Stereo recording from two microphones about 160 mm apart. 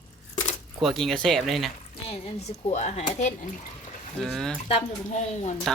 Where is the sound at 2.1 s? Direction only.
40° left (ahead or behind).